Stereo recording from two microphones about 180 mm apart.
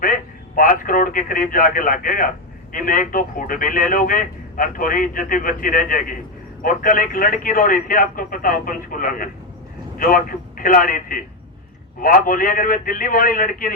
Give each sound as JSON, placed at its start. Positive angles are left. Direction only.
{"t": 0.0, "sound": "a man's voice", "side_deg": 50}